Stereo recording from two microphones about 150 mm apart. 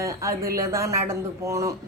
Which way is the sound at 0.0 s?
20° right (ahead or behind).